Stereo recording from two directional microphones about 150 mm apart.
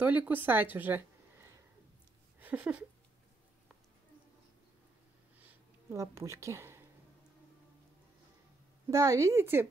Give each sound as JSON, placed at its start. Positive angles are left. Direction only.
{"t": 0.0, "sound": "speech", "side_deg": -10}
{"t": 5.4, "sound": "a sound", "side_deg": -15}
{"t": 8.9, "sound": "a woman's voice", "side_deg": -20}